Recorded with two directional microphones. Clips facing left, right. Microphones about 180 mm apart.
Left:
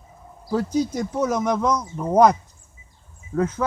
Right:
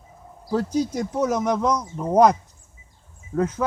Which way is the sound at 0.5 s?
5° left (ahead or behind).